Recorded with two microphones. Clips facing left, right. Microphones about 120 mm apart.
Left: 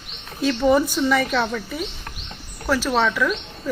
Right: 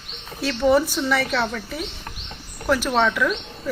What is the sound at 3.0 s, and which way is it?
Speech, 10° right (ahead or behind).